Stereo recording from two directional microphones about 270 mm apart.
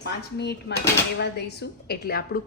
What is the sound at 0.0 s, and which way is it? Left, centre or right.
A woman's voice, left.